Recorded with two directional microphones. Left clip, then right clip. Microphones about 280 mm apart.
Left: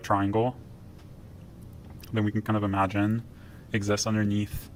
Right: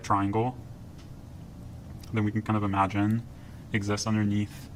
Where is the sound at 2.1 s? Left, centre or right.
Centre.